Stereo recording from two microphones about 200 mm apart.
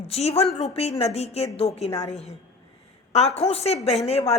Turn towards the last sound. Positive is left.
turn(degrees=30)  # may be behind; listen again after turning